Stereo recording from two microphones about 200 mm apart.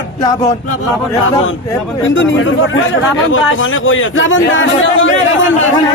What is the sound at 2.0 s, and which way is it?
A man's voice, 65° left (ahead or behind).